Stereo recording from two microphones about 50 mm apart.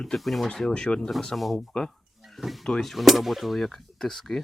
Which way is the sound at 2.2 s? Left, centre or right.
Centre.